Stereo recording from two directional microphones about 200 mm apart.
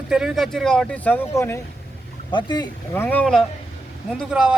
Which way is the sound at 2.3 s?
25° left (ahead or behind).